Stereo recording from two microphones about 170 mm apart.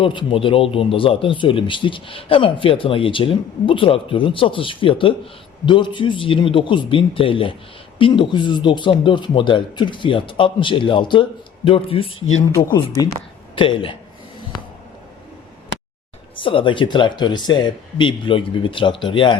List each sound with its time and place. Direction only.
0.0 s speech: 30° left (ahead or behind)
13.6 s speech: 30° left (ahead or behind)
16.3 s speech: 30° left (ahead or behind)